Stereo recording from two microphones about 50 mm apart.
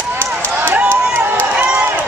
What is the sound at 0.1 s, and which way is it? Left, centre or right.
Run, right.